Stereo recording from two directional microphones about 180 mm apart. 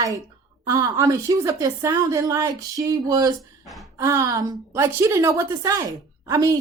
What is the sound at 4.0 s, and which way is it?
A woman's voice, 15° right (ahead or behind).